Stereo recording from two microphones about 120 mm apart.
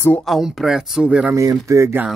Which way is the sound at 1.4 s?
25° right (ahead or behind).